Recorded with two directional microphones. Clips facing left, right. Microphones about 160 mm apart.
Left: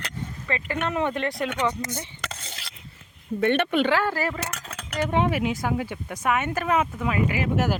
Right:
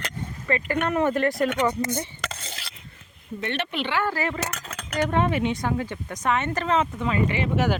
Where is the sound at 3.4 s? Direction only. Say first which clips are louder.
Left 7 dB; 50° left (ahead or behind).